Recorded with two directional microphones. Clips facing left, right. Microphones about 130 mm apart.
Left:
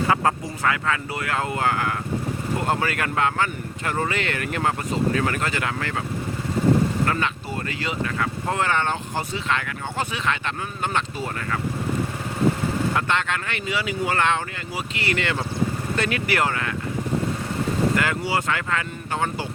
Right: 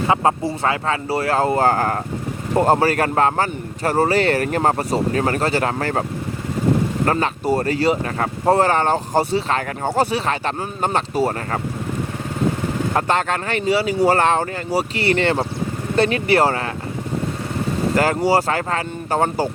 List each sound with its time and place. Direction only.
0.1 s speech: 25° right (ahead or behind)
12.9 s speech: 40° right (ahead or behind)
17.9 s speech: 40° right (ahead or behind)